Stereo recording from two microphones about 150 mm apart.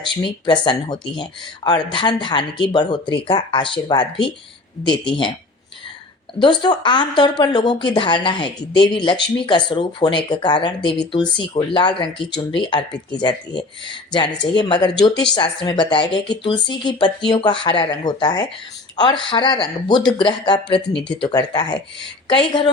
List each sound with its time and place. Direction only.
0.2 s speech: 30° left (ahead or behind)
6.4 s a woman's voice: 30° left (ahead or behind)